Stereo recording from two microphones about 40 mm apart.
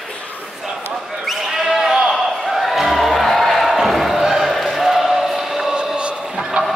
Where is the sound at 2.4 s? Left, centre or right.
Centre.